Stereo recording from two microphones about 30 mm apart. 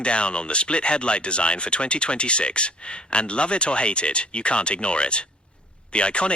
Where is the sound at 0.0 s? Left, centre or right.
Left.